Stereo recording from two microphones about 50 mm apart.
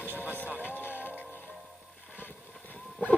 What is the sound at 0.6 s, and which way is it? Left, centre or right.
Music, left.